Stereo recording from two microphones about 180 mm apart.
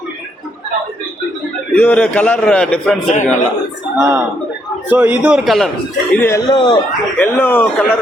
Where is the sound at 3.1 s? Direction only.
40° left (ahead or behind).